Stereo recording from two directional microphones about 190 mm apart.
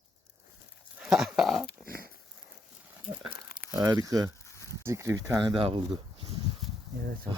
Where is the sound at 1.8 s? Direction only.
50° right (ahead or behind).